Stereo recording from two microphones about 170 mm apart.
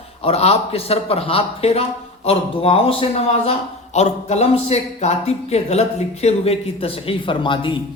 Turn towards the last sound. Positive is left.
turn(degrees=30)  # may be behind; listen again after turning